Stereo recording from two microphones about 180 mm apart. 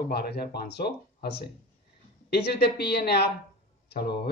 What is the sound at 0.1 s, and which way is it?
A man's voice, 60° left (ahead or behind).